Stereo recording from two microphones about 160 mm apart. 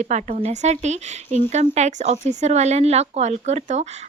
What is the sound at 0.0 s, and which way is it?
Speech, 45° right (ahead or behind).